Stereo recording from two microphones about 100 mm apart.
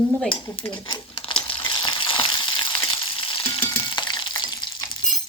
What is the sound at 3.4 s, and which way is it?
Frying, 25° left (ahead or behind).